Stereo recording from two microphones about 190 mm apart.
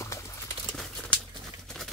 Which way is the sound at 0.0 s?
15° left (ahead or behind).